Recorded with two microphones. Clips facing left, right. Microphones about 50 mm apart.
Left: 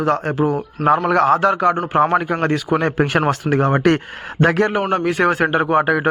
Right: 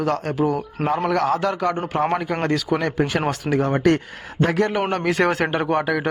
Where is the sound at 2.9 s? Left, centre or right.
Left.